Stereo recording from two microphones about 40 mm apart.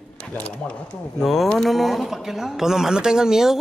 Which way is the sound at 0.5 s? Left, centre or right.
Left.